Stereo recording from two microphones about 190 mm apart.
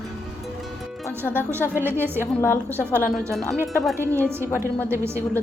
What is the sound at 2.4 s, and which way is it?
A woman's voice, 10° left (ahead or behind).